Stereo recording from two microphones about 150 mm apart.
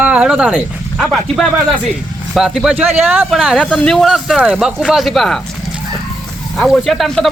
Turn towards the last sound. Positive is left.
turn(degrees=0)  # may be behind; listen again after turning